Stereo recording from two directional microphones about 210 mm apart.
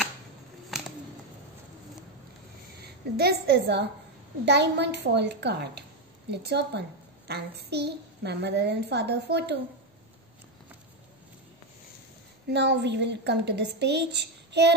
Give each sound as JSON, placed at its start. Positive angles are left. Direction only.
{"t": 0.7, "sound": "a sound", "side_deg": 0}
{"t": 3.2, "sound": "a child's voice", "side_deg": -50}
{"t": 12.4, "sound": "a child's voice", "side_deg": -55}